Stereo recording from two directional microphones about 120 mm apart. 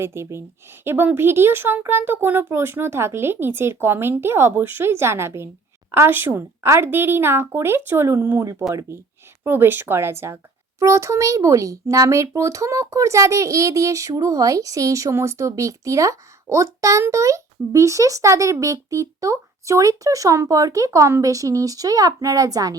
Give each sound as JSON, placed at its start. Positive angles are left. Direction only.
{"t": 0.0, "sound": "speech", "side_deg": -20}